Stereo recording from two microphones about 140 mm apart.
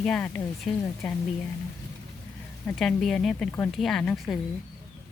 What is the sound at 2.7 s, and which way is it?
Speech, 5° left (ahead or behind).